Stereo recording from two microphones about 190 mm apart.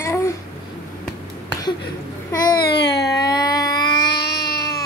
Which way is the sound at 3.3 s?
20° left (ahead or behind).